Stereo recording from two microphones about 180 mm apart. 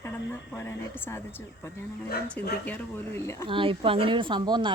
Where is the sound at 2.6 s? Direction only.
10° left (ahead or behind).